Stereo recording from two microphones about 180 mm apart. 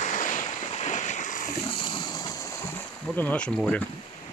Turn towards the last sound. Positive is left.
turn(degrees=5)  # may be behind; listen again after turning